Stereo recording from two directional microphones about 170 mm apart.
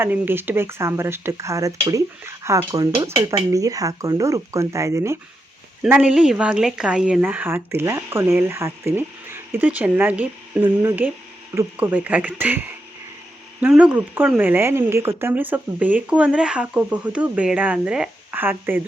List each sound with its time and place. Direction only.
0.0 s speech: 10° right (ahead or behind)
5.8 s speech: 5° right (ahead or behind)